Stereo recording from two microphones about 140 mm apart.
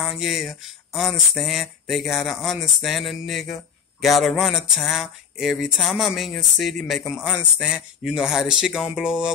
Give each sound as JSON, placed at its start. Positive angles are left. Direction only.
{"t": 0.0, "sound": "speech", "side_deg": 0}